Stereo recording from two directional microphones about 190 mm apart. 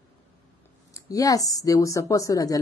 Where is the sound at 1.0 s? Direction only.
20° left (ahead or behind).